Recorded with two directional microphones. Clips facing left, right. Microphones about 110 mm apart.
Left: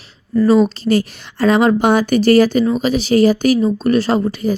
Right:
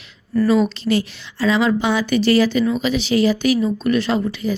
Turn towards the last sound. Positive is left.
turn(degrees=45)  # may be behind; listen again after turning